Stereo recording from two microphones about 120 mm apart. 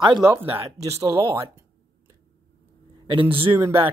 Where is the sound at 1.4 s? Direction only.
25° right (ahead or behind).